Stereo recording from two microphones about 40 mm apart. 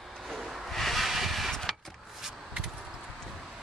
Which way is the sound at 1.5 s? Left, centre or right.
Centre.